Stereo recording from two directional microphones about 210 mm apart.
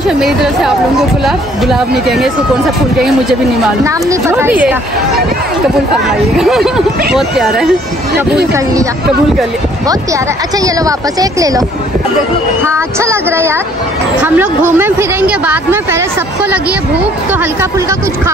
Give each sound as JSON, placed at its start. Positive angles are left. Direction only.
{"t": 1.2, "sound": "speech", "side_deg": 0}
{"t": 3.8, "sound": "a woman's voice", "side_deg": -15}
{"t": 10.6, "sound": "a woman's voice", "side_deg": -15}
{"t": 12.6, "sound": "a woman's voice", "side_deg": -15}
{"t": 17.3, "sound": "a woman's voice", "side_deg": -10}